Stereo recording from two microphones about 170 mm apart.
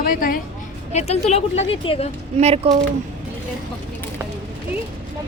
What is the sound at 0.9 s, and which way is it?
Speech, 40° left (ahead or behind).